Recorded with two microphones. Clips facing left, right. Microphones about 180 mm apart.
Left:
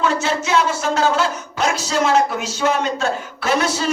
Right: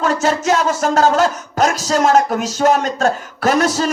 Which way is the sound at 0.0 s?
45° right (ahead or behind).